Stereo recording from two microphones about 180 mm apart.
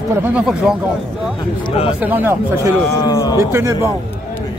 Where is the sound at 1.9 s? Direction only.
10° right (ahead or behind).